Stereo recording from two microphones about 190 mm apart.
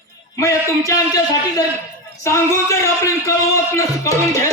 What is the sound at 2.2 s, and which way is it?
Speech, 15° left (ahead or behind).